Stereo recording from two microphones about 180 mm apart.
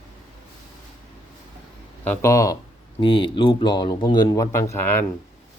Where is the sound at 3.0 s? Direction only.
30° left (ahead or behind).